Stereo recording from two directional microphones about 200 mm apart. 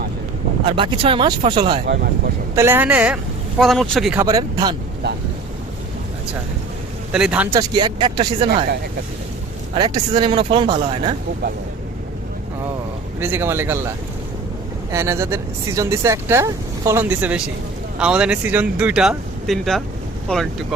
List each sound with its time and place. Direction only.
0.7 s speech: 25° right (ahead or behind)
2.6 s speech: 10° right (ahead or behind)
4.2 s speech: 20° right (ahead or behind)
7.1 s speech: 5° right (ahead or behind)
7.5 s speech: 20° right (ahead or behind)
9.7 s speech: 20° right (ahead or behind)
13.1 s speech: 10° right (ahead or behind)
14.9 s speech: 15° right (ahead or behind); by 20.7 s centre (ahead or behind)